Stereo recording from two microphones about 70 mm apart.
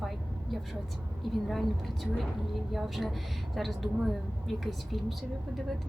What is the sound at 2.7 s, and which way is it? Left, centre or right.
A woman's voice, centre.